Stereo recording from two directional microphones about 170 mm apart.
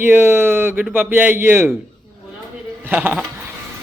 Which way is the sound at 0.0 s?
10° right (ahead or behind).